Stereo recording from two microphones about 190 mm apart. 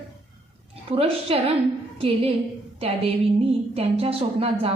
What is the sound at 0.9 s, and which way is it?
Speech, 30° right (ahead or behind).